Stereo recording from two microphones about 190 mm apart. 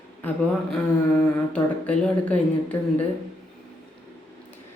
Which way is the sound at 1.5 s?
5° left (ahead or behind).